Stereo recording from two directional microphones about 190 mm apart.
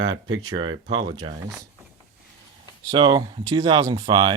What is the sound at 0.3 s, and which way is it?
Speech, 90° right.